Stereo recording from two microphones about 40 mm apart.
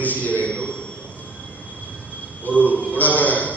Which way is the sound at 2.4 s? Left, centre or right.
Left.